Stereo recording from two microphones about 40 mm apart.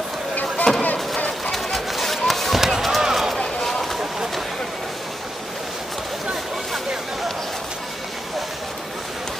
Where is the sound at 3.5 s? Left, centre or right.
Centre.